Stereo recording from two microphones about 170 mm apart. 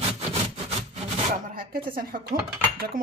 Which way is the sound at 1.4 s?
55° right (ahead or behind).